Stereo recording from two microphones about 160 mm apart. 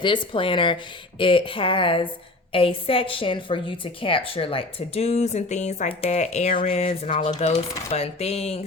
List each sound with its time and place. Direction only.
0.0 s a woman's voice: 30° left (ahead or behind)